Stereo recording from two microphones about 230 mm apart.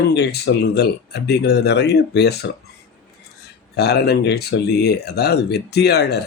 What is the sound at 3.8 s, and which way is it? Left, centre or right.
Speech, left.